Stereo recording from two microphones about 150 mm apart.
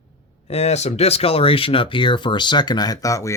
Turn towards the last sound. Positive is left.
turn(degrees=20)  # may be behind; listen again after turning